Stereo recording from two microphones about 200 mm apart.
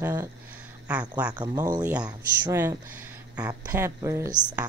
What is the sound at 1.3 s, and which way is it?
Speech, 20° right (ahead or behind).